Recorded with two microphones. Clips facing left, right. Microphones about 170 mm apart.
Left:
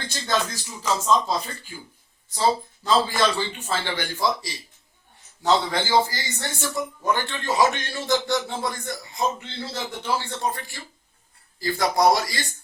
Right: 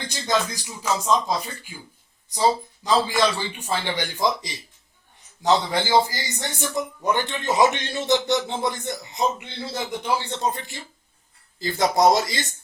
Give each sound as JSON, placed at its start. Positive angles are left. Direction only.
{"t": 0.0, "sound": "a man's voice", "side_deg": -15}